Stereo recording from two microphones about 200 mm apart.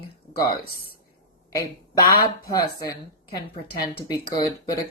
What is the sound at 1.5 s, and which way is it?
Speech, 20° left (ahead or behind).